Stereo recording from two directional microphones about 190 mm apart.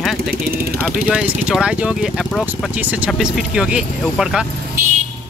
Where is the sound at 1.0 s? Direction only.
5° right (ahead or behind).